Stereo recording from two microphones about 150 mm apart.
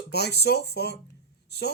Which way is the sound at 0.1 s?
90° left.